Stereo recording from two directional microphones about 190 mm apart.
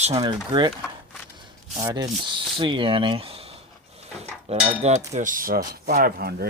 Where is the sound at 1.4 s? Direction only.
20° right (ahead or behind).